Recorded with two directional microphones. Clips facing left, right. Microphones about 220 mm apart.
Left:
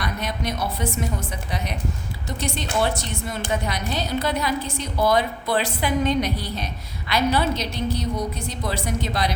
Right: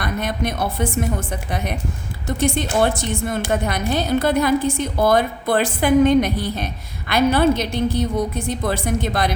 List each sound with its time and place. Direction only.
0.0 s a woman's voice: 50° right (ahead or behind)